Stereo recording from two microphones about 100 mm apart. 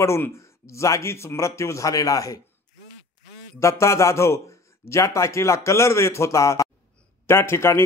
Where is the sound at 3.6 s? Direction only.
30° left (ahead or behind).